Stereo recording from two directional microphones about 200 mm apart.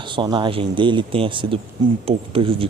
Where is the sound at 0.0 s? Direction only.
25° right (ahead or behind).